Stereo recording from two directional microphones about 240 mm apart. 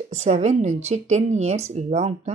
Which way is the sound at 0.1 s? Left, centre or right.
Right.